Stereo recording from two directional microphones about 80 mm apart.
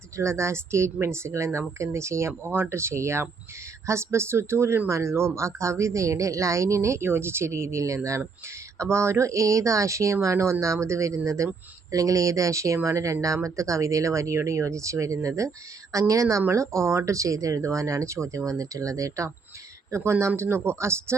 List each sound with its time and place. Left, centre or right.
0.2 s speech: right